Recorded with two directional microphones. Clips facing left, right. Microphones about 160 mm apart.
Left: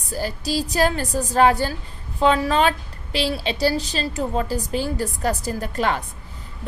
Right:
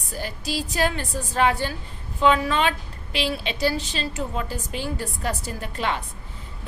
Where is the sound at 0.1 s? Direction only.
35° left (ahead or behind).